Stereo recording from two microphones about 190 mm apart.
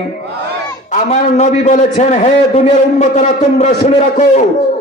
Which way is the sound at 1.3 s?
35° left (ahead or behind).